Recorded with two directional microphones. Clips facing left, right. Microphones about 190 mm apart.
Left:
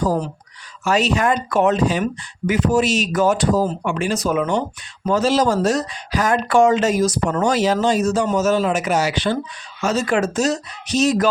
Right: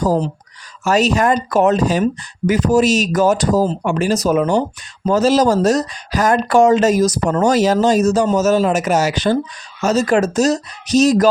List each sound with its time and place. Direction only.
0.0 s speech: 40° right (ahead or behind)